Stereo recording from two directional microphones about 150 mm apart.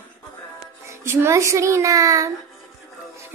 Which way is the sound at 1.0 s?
15° right (ahead or behind).